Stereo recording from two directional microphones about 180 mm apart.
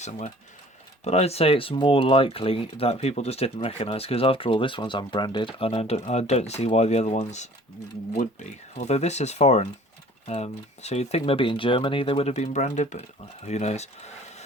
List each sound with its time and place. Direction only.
0.0 s speech: 40° left (ahead or behind)